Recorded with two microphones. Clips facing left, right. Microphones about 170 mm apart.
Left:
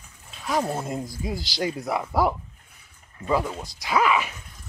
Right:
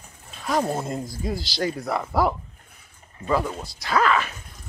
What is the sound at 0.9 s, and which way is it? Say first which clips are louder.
Speech: right 1 dB; 10° left (ahead or behind).